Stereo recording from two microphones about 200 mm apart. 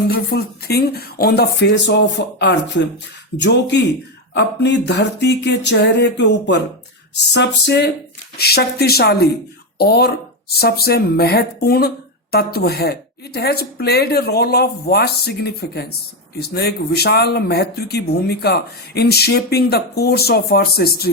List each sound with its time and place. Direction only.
0.1 s speech: 50° left (ahead or behind)